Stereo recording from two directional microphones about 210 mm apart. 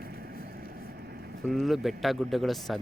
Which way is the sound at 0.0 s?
45° right (ahead or behind).